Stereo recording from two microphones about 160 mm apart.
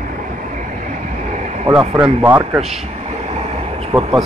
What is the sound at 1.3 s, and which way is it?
Vehicle, 50° right (ahead or behind).